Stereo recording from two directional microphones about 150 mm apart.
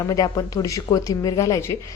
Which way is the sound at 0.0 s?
25° left (ahead or behind).